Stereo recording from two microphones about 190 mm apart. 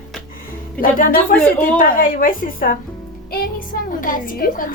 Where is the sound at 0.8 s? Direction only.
50° left (ahead or behind).